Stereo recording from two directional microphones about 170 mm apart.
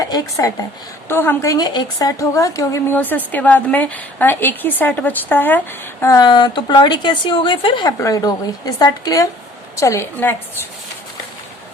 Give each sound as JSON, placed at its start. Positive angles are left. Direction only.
{"t": 0.0, "sound": "a woman's voice", "side_deg": 20}